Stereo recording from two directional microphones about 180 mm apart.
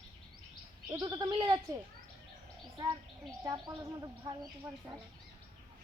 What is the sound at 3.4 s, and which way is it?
A woman's voice, 20° right (ahead or behind).